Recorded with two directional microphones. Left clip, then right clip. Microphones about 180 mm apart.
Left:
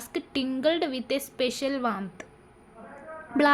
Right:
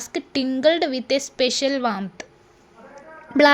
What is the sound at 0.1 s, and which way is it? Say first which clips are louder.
A woman's voice: right 5 dB; 30° right (ahead or behind).